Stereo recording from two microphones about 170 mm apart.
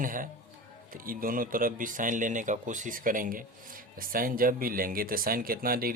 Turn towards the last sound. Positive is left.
turn(degrees=-60)  # may be behind; listen again after turning